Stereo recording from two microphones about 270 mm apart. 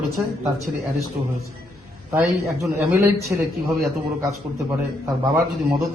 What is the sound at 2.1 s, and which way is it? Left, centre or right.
A man's voice, centre.